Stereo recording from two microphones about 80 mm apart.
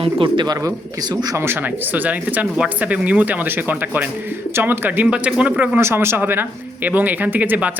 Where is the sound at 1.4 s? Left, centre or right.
Right.